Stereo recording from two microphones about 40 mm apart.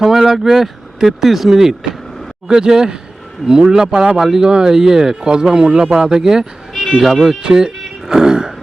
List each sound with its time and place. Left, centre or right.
0.0 s speech: centre
4.4 s speech: centre